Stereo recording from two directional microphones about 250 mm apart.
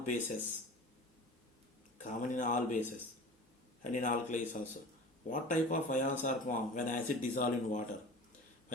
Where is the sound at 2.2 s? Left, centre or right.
Left.